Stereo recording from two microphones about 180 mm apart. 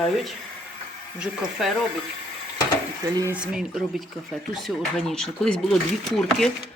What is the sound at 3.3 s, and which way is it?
Speech, 5° right (ahead or behind).